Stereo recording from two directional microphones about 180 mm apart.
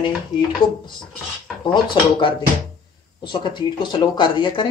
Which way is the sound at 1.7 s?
25° left (ahead or behind).